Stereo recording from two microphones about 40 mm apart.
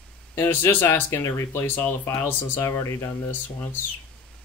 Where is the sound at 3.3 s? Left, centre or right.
Left.